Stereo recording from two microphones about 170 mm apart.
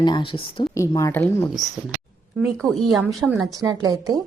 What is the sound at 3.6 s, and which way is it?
Speech, 20° right (ahead or behind).